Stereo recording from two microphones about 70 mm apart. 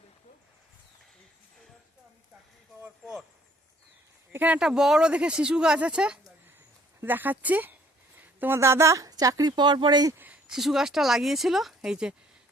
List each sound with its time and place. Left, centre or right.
3.0 s a sound: centre
4.3 s speech: right
4.6 s speech: centre
7.0 s speech: right
8.4 s a woman's voice: right
10.4 s speech: centre